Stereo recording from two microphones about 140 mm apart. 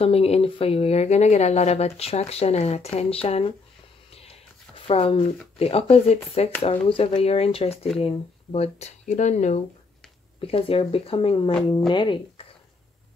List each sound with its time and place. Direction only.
0.0 s speech: 45° left (ahead or behind)
4.7 s speech: 40° left (ahead or behind)
10.4 s speech: 40° left (ahead or behind)